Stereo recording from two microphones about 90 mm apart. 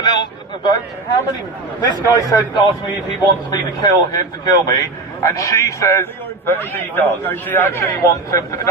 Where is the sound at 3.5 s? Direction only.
45° left (ahead or behind).